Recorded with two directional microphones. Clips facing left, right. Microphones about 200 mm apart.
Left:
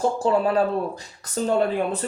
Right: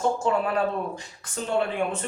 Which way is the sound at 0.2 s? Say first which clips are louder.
Left 4 dB; 35° left (ahead or behind).